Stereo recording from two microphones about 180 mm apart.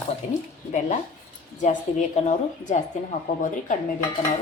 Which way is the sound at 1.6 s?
40° left (ahead or behind).